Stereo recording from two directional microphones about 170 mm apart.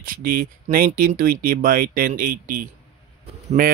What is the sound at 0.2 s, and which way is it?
Speech, 60° right (ahead or behind).